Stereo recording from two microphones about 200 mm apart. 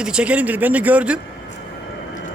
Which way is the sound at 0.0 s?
5° right (ahead or behind).